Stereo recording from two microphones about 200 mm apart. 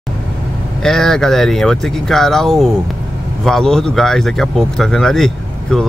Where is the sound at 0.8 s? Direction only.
Centre (ahead or behind).